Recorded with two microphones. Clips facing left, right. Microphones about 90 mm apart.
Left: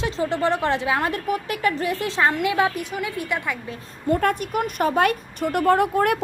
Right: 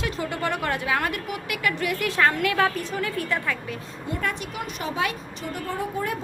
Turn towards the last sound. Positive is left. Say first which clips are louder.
# left 10 dB
turn(degrees=65)  # may be behind; listen again after turning